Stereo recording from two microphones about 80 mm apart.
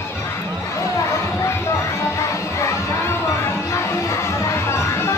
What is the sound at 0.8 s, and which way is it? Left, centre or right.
Music, left.